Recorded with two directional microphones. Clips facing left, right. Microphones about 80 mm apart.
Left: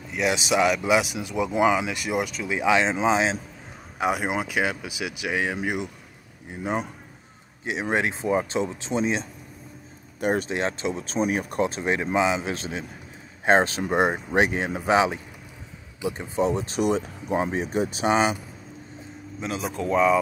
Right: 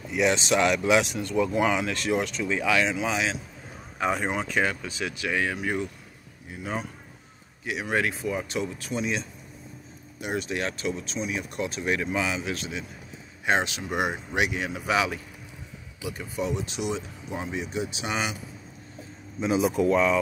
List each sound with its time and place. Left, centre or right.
0.1 s speech: centre
2.6 s speech: left
4.0 s speech: centre
6.5 s speech: left
10.5 s speech: left
11.1 s speech: left
11.5 s speech: left
19.4 s speech: centre
19.9 s speech: centre